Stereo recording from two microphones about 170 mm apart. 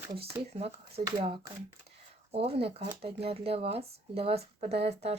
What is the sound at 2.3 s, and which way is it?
Speech, 35° right (ahead or behind).